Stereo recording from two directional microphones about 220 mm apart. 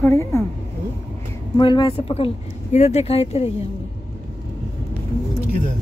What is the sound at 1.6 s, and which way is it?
Speech, 20° left (ahead or behind).